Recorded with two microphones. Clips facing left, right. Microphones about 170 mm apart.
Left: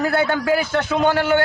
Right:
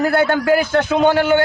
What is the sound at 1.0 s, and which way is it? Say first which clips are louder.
Speech: right 2 dB; 20° right (ahead or behind).